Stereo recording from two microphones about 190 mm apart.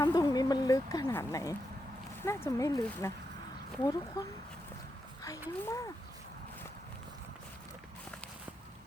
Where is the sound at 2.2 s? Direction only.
15° left (ahead or behind).